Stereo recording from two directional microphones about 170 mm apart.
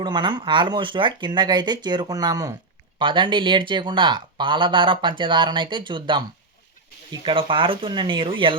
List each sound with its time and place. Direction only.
0.0 s speech: 25° right (ahead or behind)
7.3 s speech: 30° right (ahead or behind)